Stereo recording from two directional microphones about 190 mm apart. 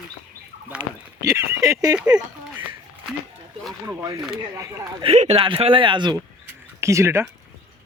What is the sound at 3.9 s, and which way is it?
Speech, 15° right (ahead or behind).